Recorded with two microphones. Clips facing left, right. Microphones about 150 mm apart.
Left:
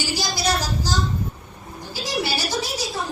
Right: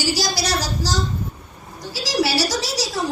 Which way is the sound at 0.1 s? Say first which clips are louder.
Even; 85° right.